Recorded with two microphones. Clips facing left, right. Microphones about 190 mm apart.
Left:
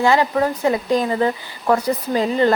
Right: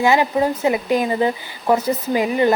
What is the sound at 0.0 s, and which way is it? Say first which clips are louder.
A woman's voice: even; 15° right (ahead or behind).